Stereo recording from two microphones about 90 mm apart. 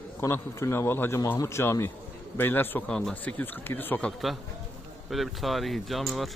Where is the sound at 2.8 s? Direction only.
10° left (ahead or behind).